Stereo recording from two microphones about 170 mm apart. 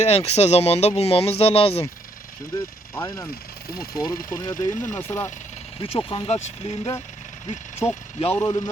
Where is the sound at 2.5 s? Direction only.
20° left (ahead or behind).